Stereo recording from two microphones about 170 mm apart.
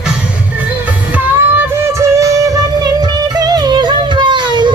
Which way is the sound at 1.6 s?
15° right (ahead or behind).